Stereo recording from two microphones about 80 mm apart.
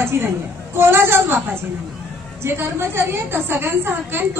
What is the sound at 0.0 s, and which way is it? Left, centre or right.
A woman's voice, right.